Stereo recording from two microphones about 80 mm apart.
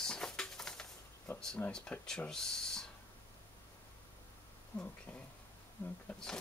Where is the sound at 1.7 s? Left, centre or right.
Centre.